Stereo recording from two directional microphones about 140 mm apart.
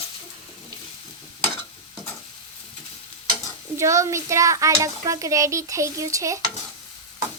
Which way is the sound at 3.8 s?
20° right (ahead or behind).